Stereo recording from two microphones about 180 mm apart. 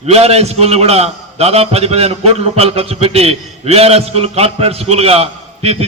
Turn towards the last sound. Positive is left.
turn(degrees=-35)  # may be behind; listen again after turning